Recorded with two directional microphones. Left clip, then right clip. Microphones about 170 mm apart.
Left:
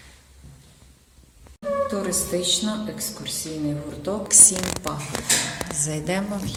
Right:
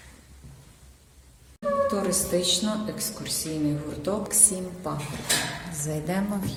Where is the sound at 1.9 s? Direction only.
5° right (ahead or behind).